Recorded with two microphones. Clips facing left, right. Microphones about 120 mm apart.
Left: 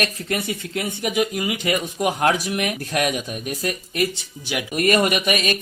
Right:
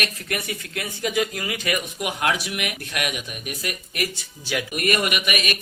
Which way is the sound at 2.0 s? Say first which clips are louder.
Left 6 dB; 40° left (ahead or behind).